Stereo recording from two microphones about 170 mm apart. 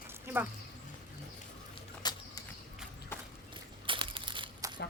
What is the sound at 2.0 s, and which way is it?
Vehicle, 25° left (ahead or behind).